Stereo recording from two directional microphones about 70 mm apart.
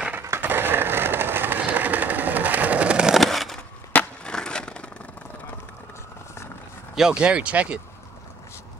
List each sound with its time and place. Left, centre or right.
0.4 s vehicle: right; by 3.2 s centre
3.2 s a sound: centre
3.9 s skateboard: centre
7.0 s speech: centre